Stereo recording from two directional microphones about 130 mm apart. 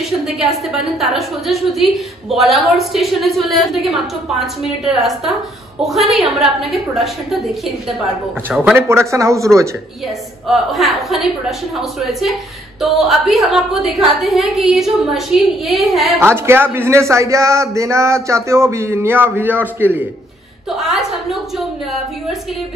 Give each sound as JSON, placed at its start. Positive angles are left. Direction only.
{"t": 0.2, "sound": "a woman's voice", "side_deg": 0}
{"t": 8.5, "sound": "a man's voice", "side_deg": -15}
{"t": 10.5, "sound": "a woman's voice", "side_deg": 0}
{"t": 16.2, "sound": "speech", "side_deg": -20}
{"t": 20.7, "sound": "a woman's voice", "side_deg": 0}